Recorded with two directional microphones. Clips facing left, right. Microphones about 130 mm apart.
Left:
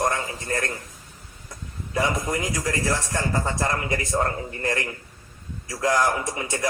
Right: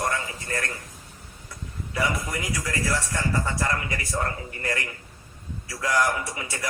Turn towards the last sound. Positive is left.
turn(degrees=30)  # may be behind; listen again after turning